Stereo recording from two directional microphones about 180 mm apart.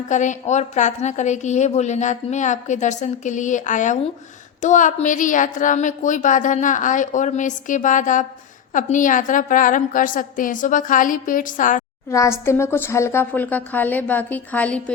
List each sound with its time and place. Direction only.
0.1 s a woman's voice: 40° left (ahead or behind)
12.1 s a woman's voice: 15° left (ahead or behind)